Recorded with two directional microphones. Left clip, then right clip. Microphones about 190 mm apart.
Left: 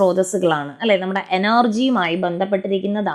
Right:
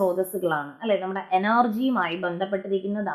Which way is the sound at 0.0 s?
35° left (ahead or behind).